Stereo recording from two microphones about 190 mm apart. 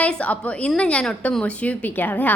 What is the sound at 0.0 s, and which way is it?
A woman's voice, 5° left (ahead or behind).